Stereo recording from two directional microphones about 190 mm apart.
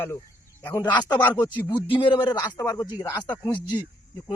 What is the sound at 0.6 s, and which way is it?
A man's voice, 15° left (ahead or behind).